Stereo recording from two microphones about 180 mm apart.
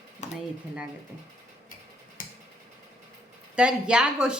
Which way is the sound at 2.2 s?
50° left (ahead or behind).